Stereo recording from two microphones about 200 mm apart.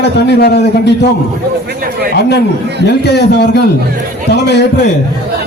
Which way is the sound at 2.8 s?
55° left (ahead or behind).